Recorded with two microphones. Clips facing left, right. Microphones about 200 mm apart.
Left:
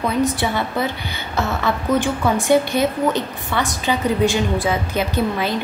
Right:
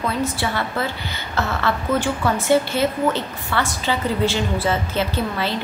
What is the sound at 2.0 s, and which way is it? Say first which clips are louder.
A woman's voice: left 2 dB; 15° left (ahead or behind).